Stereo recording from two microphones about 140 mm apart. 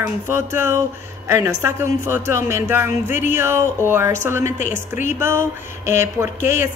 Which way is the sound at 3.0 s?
65° left (ahead or behind).